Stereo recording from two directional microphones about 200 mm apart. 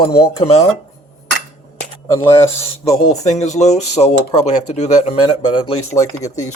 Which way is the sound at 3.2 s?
35° left (ahead or behind).